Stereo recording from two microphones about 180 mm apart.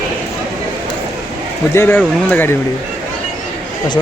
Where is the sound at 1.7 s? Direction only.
15° left (ahead or behind).